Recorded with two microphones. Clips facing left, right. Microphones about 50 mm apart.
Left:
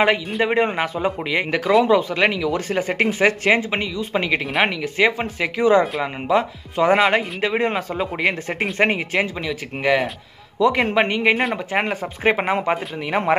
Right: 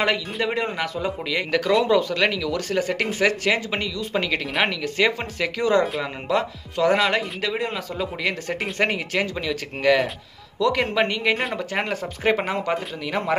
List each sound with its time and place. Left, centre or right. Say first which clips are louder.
0.4 s speech: left 5 dB; left